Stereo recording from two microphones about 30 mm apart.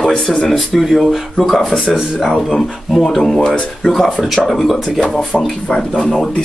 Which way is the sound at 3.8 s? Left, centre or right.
Left.